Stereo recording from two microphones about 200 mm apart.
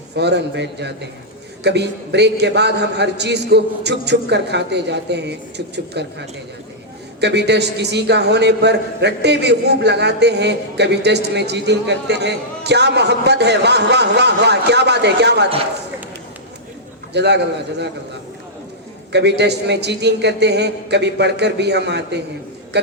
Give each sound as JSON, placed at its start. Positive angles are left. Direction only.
{"t": 0.2, "sound": "a man's voice", "side_deg": -55}
{"t": 17.2, "sound": "a man's voice", "side_deg": -60}
{"t": 19.1, "sound": "a man's voice", "side_deg": -55}